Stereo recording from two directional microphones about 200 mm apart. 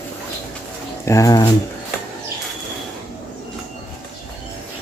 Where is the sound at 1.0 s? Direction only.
15° left (ahead or behind).